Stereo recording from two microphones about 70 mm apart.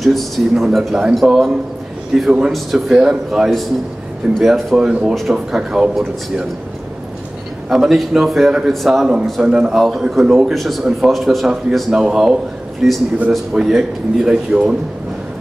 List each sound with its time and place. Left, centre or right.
0.0 s a man's voice: centre
4.7 s a man's voice: centre
7.7 s a man's voice: centre